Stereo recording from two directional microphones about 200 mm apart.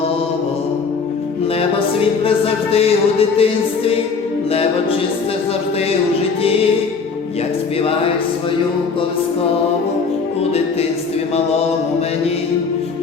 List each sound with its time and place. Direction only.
2.7 s music: 30° left (ahead or behind)